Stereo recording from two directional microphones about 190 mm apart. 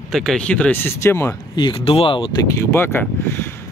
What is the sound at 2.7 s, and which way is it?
Speech, 10° left (ahead or behind).